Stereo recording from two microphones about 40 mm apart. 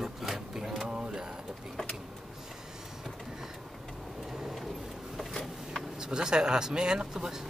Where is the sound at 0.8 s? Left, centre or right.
Centre.